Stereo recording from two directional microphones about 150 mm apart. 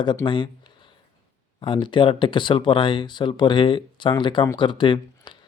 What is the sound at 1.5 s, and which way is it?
Speech, 35° left (ahead or behind).